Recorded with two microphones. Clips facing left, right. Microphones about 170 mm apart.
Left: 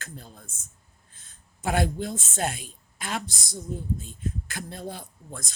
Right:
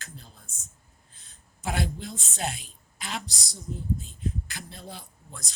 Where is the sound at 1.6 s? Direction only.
50° left (ahead or behind).